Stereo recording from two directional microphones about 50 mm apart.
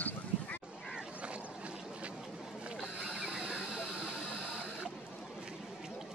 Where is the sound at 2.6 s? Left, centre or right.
Right.